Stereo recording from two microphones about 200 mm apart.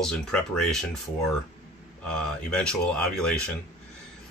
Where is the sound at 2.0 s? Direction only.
5° left (ahead or behind).